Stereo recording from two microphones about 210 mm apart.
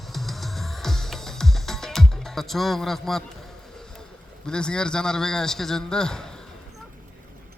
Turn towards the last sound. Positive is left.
turn(degrees=5)  # may be behind; listen again after turning